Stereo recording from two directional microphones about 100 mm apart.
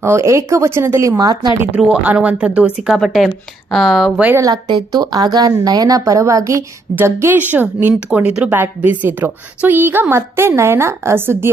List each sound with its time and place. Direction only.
0.0 s a woman's voice: 30° right (ahead or behind)
1.8 s speech: 10° right (ahead or behind)
4.4 s a woman's voice: 40° right (ahead or behind); by 7.9 s 20° right (ahead or behind)
8.1 s speech: 5° right (ahead or behind)
8.5 s a woman's voice: 20° right (ahead or behind)